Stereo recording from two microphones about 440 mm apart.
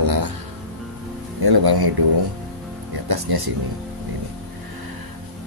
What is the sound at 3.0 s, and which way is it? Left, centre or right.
Speech, right.